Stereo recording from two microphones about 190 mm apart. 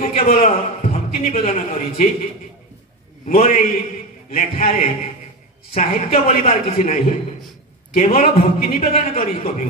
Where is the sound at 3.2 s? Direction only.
40° left (ahead or behind).